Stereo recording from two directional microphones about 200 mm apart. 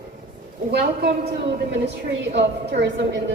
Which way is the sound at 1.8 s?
55° right (ahead or behind).